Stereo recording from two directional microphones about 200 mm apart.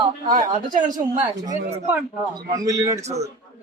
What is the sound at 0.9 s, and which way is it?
Speech, 20° right (ahead or behind).